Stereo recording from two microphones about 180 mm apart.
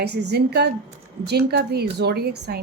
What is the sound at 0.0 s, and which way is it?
A woman's voice, 65° right (ahead or behind).